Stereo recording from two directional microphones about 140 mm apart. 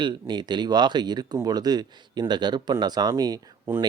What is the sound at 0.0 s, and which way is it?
Speech, 35° right (ahead or behind).